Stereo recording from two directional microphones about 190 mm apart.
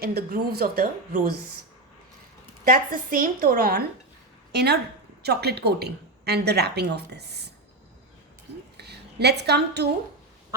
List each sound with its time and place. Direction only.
0.0 s speech: 55° right (ahead or behind)
2.6 s a woman's voice: 45° right (ahead or behind)
8.8 s a woman's voice: 60° right (ahead or behind)